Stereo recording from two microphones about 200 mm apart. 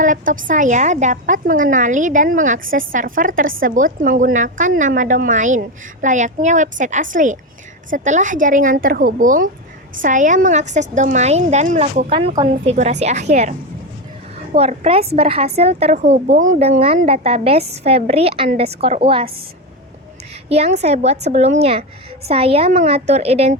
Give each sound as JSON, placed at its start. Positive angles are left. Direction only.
{"t": 0.0, "sound": "a woman's voice", "side_deg": -40}
{"t": 12.1, "sound": "a woman's voice", "side_deg": -25}
{"t": 14.5, "sound": "a woman's voice", "side_deg": -30}
{"t": 20.5, "sound": "a woman's voice", "side_deg": -30}